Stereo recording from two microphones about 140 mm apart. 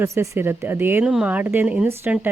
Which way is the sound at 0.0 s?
20° right (ahead or behind).